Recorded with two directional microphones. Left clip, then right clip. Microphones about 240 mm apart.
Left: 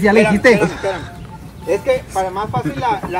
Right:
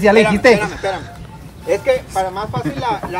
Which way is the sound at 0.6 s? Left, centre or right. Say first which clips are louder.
Left 2 dB; centre.